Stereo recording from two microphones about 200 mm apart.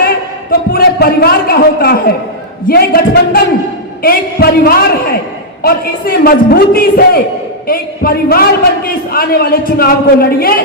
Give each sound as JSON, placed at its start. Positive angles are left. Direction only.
{"t": 0.7, "sound": "a man's voice", "side_deg": 50}